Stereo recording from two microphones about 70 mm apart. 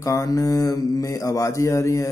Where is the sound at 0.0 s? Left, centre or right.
Left.